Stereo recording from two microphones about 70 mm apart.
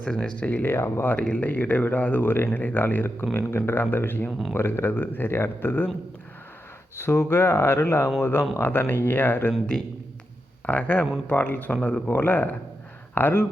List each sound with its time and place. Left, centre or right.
0.0 s speech: centre; by 1.1 s left
1.1 s speech: left
4.3 s speech: centre
4.5 s speech: left
7.0 s speech: left
10.7 s speech: left